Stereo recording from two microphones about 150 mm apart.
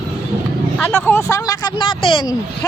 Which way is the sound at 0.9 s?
10° left (ahead or behind).